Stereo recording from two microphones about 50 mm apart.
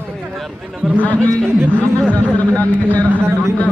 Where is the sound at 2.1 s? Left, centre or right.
Left.